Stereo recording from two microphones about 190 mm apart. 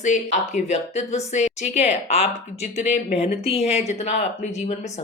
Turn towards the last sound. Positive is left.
turn(degrees=35)  # may be behind; listen again after turning